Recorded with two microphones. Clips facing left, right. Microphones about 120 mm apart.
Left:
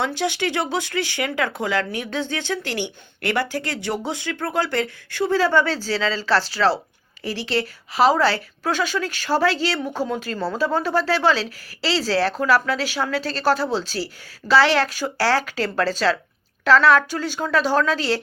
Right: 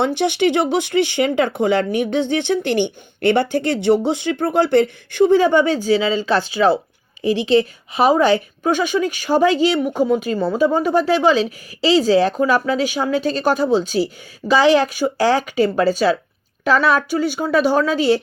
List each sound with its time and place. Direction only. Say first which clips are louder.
0.0 s a woman's voice: right 6 dB; 20° right (ahead or behind)